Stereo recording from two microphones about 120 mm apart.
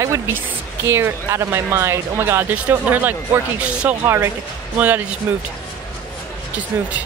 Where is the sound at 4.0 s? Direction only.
20° right (ahead or behind).